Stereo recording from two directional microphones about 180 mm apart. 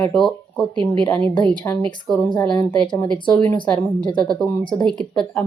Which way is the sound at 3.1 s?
5° left (ahead or behind).